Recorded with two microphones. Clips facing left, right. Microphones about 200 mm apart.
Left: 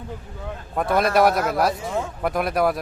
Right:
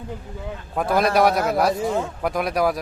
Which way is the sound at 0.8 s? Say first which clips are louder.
Even; centre (ahead or behind).